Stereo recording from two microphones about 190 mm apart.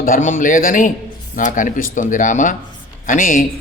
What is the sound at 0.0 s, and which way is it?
A man's voice, 45° left (ahead or behind).